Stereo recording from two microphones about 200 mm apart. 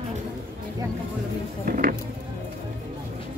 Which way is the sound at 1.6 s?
45° right (ahead or behind).